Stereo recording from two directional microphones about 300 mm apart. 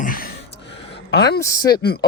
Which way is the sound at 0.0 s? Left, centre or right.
Left.